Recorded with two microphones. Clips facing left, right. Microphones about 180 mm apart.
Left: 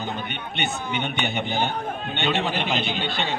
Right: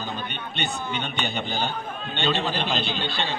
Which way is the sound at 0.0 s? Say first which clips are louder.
Left 2 dB; 20° left (ahead or behind).